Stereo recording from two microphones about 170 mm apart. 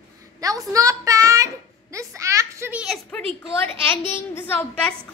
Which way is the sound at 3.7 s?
15° left (ahead or behind).